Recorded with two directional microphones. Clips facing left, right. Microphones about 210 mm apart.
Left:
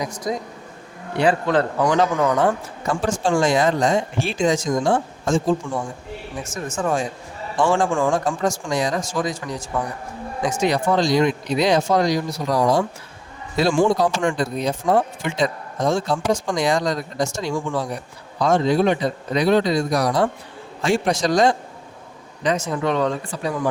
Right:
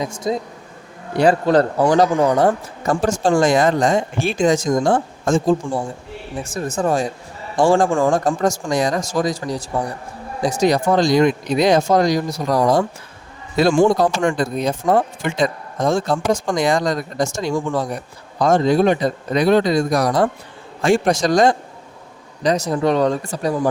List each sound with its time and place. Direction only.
0.0 s speech: 25° right (ahead or behind)
1.1 s speech: 40° right (ahead or behind)
6.4 s speech: 35° right (ahead or behind)